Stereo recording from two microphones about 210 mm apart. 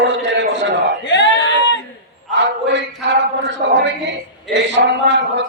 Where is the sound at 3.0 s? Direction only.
55° right (ahead or behind).